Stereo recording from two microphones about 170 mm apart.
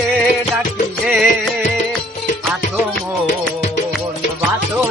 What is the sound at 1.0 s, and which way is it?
Music, 5° right (ahead or behind).